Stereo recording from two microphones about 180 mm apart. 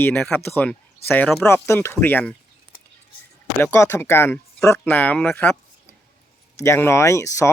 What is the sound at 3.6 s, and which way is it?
Speech, 10° left (ahead or behind).